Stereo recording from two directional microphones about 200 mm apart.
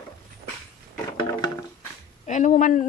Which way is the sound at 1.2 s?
20° left (ahead or behind).